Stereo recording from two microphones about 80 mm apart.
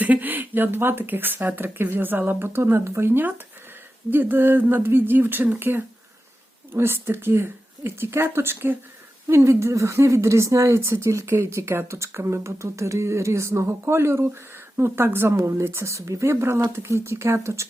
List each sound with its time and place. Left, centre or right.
0.0 s speech: right